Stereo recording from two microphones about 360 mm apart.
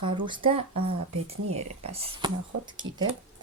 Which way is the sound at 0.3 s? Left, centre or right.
Centre.